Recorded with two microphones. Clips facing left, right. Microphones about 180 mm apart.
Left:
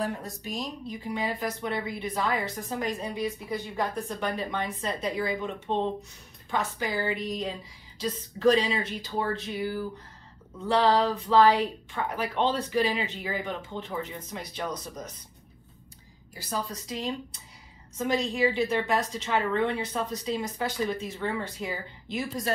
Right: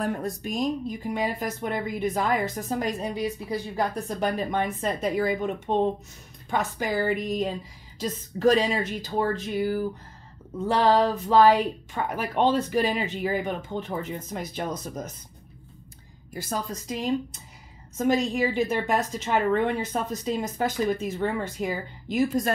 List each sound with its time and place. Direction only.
0.0 s a woman's voice: 50° right (ahead or behind); by 4.3 s 35° right (ahead or behind)
4.5 s a woman's voice: 50° right (ahead or behind)
7.0 s a woman's voice: 45° right (ahead or behind)
16.3 s a woman's voice: 45° right (ahead or behind)